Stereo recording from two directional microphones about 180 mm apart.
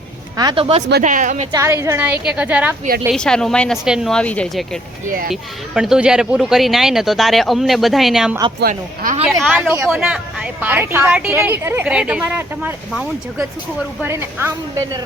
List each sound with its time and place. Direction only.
0.3 s speech: 25° right (ahead or behind)
1.0 s speech: 45° right (ahead or behind)
1.5 s a woman's voice: 15° right (ahead or behind)
3.1 s speech: 5° left (ahead or behind)
5.0 s speech: 50° right (ahead or behind)
5.3 s speech: centre (ahead or behind)
8.6 s speech: 50° right (ahead or behind)
9.4 s a woman's voice: 5° right (ahead or behind)
14.0 s a woman's voice: 15° right (ahead or behind)